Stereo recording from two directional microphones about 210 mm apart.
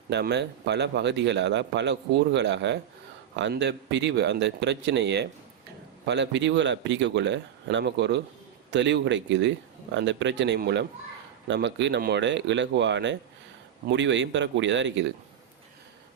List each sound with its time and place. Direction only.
0.1 s a man's voice: 55° right (ahead or behind)